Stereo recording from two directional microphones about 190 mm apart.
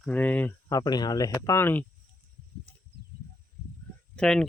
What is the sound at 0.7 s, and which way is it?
Speech, 20° left (ahead or behind).